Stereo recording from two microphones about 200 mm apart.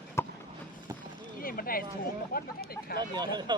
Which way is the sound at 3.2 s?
20° right (ahead or behind).